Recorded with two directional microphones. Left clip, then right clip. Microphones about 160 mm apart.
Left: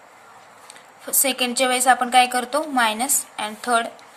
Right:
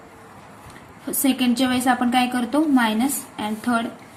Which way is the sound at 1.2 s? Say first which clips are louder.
Left 1 dB; 35° left (ahead or behind).